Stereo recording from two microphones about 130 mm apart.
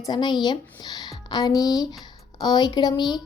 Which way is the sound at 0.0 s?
35° left (ahead or behind).